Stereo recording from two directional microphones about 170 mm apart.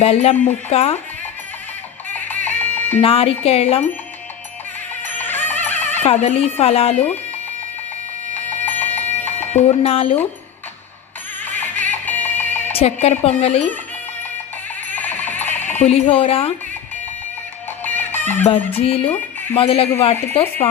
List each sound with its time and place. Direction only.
0.0 s speech: 35° left (ahead or behind)
2.1 s music: 10° left (ahead or behind)
3.0 s speech: 35° left (ahead or behind)
5.0 s music: 10° left (ahead or behind)
6.0 s speech: 40° left (ahead or behind)
8.4 s music: 10° left (ahead or behind)
9.5 s speech: 40° left (ahead or behind)
11.4 s music: 10° left (ahead or behind)
12.7 s speech: 40° left (ahead or behind)
14.9 s music: 10° left (ahead or behind)
15.8 s speech: 35° left (ahead or behind)
17.8 s music: 10° left (ahead or behind)
18.4 s speech: 35° left (ahead or behind)